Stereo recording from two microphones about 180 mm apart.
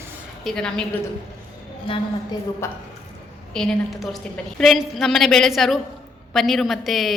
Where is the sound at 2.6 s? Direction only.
15° left (ahead or behind).